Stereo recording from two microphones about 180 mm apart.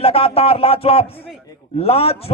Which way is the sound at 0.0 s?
30° left (ahead or behind).